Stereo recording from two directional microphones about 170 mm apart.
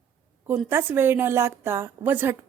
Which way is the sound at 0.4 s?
10° right (ahead or behind).